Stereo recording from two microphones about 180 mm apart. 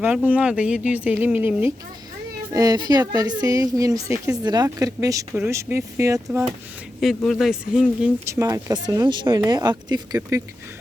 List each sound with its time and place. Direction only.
0.0 s speech: 10° right (ahead or behind)
7.2 s speech: centre (ahead or behind)